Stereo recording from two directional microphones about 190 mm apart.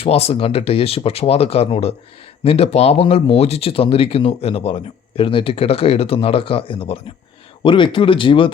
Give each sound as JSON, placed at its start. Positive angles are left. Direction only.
{"t": 0.0, "sound": "speech", "side_deg": 30}